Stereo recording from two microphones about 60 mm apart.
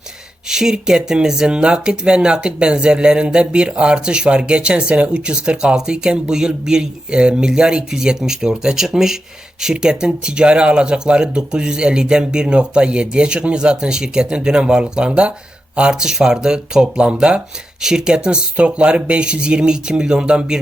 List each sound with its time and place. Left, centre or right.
0.4 s speech: centre